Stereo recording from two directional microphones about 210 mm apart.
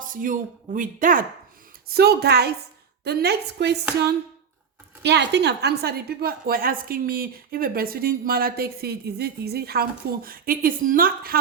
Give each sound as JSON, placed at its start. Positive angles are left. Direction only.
{"t": 0.0, "sound": "speech", "side_deg": -40}
{"t": 1.9, "sound": "a woman's voice", "side_deg": -50}
{"t": 5.0, "sound": "a woman's voice", "side_deg": -55}